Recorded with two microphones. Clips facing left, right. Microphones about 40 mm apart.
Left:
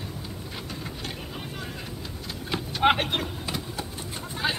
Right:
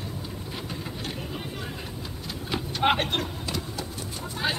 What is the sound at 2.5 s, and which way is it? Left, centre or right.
Vehicle, centre.